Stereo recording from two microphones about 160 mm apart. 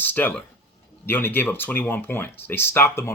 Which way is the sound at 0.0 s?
10° left (ahead or behind).